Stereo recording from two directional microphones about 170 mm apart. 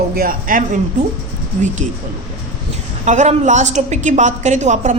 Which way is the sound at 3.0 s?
45° right (ahead or behind).